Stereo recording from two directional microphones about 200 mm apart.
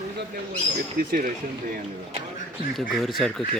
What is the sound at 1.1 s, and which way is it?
Speech, 45° right (ahead or behind).